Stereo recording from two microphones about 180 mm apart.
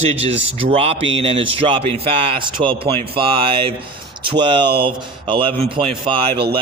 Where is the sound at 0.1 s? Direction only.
35° right (ahead or behind).